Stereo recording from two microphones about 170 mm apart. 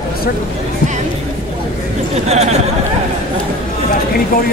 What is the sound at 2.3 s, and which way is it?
Speech, 40° right (ahead or behind).